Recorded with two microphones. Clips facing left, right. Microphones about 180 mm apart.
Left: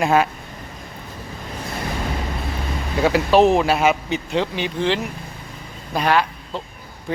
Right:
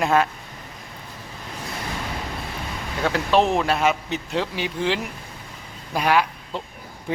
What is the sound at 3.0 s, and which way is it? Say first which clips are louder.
Speech: left 5 dB; 5° left (ahead or behind).